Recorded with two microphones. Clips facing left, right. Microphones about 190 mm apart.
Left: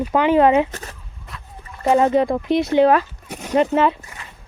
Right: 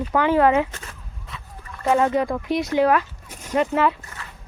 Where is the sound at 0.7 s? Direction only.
40° left (ahead or behind).